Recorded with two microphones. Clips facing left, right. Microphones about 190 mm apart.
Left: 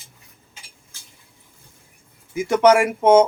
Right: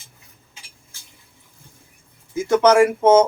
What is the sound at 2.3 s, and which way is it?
Speech, 15° left (ahead or behind).